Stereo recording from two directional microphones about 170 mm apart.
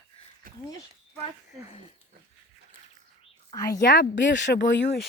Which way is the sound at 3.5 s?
20° left (ahead or behind).